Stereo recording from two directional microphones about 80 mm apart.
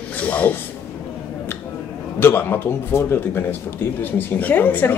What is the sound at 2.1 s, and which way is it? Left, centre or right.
Speech, left.